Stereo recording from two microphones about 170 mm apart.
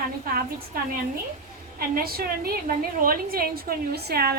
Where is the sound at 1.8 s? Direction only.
60° right (ahead or behind).